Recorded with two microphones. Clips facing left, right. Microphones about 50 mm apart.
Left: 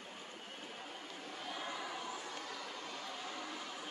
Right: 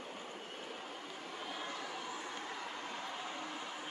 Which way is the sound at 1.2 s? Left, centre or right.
Centre.